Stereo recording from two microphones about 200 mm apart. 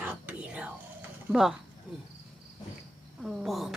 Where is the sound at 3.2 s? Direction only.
Centre (ahead or behind).